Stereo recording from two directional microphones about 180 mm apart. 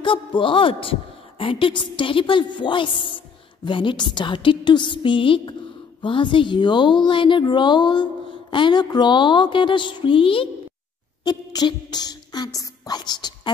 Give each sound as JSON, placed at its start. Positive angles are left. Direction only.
{"t": 0.0, "sound": "speech", "side_deg": 30}